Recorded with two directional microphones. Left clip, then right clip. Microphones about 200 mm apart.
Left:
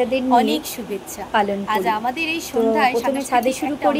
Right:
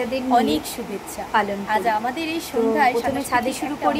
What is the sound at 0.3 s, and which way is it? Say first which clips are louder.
Speech: left 1 dB; 15° right (ahead or behind).